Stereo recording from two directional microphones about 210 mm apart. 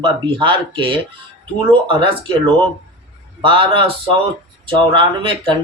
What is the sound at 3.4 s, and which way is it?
Speech, 25° right (ahead or behind).